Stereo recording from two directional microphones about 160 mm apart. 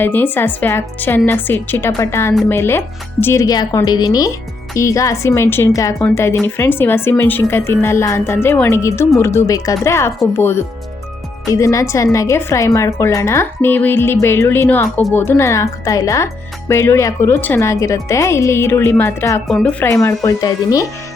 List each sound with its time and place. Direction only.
0.0 s a woman's voice: 15° left (ahead or behind)
19.5 s speech: 5° left (ahead or behind)
19.8 s speech: 15° left (ahead or behind)